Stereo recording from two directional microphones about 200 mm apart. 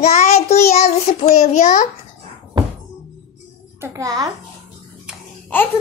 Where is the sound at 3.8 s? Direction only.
15° right (ahead or behind).